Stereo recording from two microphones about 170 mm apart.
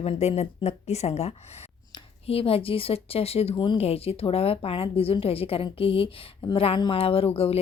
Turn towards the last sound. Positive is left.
turn(degrees=35)  # may be behind; listen again after turning